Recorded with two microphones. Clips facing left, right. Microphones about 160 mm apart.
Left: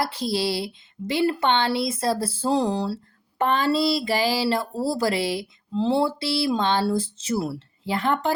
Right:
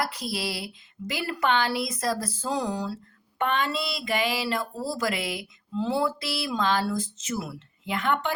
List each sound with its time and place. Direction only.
0.0 s a woman's voice: 30° left (ahead or behind)